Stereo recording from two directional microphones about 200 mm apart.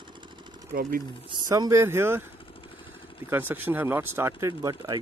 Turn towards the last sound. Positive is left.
turn(degrees=-20)  # may be behind; listen again after turning